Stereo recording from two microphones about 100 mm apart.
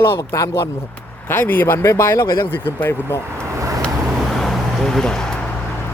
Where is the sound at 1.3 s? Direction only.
20° left (ahead or behind).